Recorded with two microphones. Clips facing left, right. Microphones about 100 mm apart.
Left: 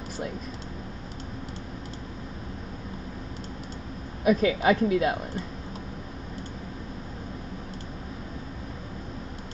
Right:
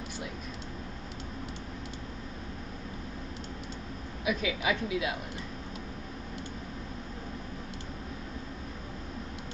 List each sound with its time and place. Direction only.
4.2 s a woman's voice: 45° left (ahead or behind)